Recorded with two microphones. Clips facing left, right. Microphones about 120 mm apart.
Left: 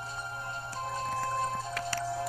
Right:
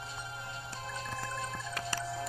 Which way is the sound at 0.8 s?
40° left (ahead or behind).